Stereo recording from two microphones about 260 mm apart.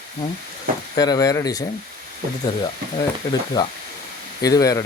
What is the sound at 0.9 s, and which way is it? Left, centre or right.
Speech, centre.